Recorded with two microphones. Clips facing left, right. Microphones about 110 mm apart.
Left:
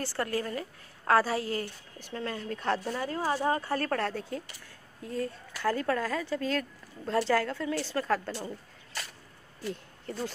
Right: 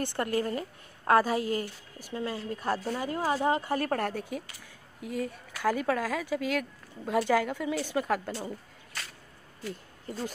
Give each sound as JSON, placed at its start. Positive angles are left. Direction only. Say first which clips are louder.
{"t": 0.0, "sound": "a woman's voice", "louder": "right 2 dB", "side_deg": -20}
{"t": 1.4, "sound": "a woman's voice", "louder": "right 2 dB", "side_deg": 40}
{"t": 2.0, "sound": "speech", "louder": "right 2 dB", "side_deg": -10}
{"t": 9.7, "sound": "speech", "louder": "left 2 dB", "side_deg": -5}